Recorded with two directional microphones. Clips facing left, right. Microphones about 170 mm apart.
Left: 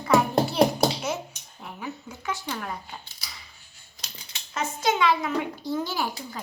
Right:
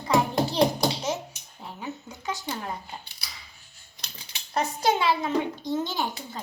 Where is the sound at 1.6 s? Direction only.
20° right (ahead or behind).